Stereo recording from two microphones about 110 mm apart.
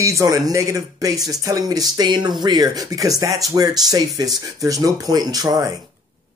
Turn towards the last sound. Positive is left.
turn(degrees=-35)  # may be behind; listen again after turning